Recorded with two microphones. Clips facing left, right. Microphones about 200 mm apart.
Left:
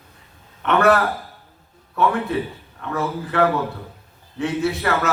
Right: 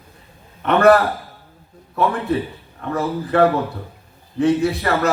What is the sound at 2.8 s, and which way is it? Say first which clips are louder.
A man's voice: right 3 dB; 35° right (ahead or behind).